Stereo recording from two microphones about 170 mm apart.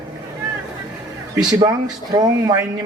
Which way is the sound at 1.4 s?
25° right (ahead or behind).